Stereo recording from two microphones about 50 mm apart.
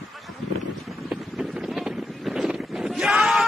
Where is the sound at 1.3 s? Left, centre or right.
Centre.